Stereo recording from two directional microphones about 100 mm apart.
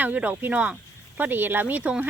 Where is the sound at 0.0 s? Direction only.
15° right (ahead or behind).